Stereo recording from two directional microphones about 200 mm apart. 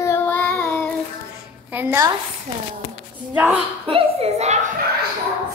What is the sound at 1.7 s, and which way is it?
Speech, 10° right (ahead or behind).